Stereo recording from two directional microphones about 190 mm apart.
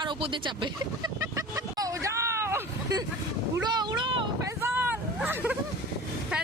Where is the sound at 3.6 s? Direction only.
25° right (ahead or behind).